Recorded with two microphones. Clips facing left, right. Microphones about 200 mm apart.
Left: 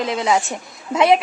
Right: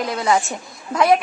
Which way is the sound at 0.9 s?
25° left (ahead or behind).